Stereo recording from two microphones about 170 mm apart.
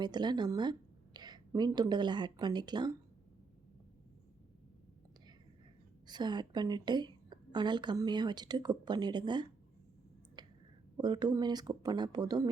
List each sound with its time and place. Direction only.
0.0 s a woman's voice: 25° right (ahead or behind)
6.1 s a woman's voice: 25° right (ahead or behind)
10.4 s clicking: 25° right (ahead or behind)
10.9 s a woman's voice: 25° right (ahead or behind)